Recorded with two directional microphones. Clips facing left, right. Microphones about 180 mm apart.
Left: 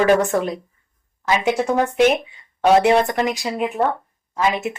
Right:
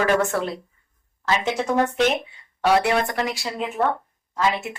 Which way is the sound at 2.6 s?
20° left (ahead or behind).